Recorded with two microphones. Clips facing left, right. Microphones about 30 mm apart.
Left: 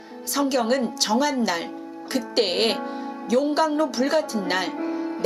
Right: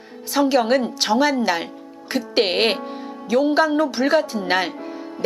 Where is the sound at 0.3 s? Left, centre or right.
Centre.